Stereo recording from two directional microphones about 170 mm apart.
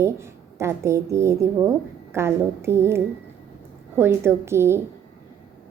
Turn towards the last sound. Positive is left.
turn(degrees=-15)  # may be behind; listen again after turning